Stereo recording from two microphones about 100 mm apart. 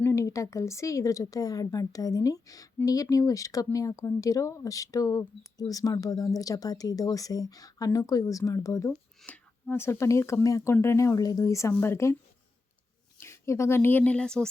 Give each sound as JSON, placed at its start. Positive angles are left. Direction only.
{"t": 0.0, "sound": "speech", "side_deg": 30}
{"t": 9.2, "sound": "speech", "side_deg": 15}
{"t": 13.1, "sound": "speech", "side_deg": 30}